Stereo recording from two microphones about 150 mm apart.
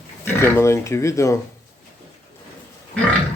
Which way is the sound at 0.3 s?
15° left (ahead or behind).